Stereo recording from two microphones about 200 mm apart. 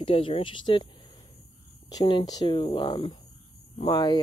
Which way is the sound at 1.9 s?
20° left (ahead or behind).